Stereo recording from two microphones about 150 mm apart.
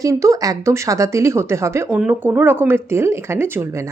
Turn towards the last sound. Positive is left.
turn(degrees=-20)  # may be behind; listen again after turning